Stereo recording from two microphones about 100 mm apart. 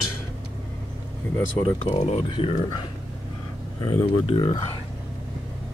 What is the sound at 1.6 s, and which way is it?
Speech, 65° left (ahead or behind).